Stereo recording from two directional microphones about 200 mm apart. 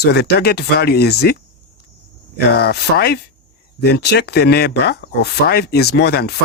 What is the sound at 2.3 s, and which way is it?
Speech, 50° left (ahead or behind).